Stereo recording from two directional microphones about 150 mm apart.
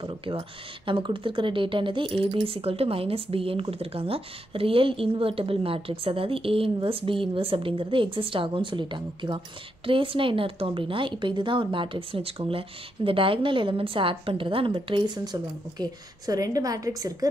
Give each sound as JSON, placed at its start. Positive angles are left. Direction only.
{"t": 0.0, "sound": "speech", "side_deg": -35}